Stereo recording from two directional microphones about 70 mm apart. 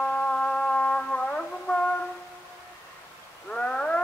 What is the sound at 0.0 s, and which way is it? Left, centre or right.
Music, centre.